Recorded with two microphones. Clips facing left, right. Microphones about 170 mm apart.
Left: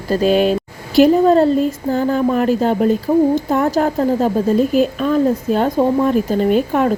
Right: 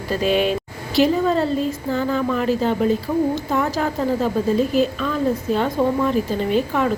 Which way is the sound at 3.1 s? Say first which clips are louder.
Left 7 dB; 25° left (ahead or behind).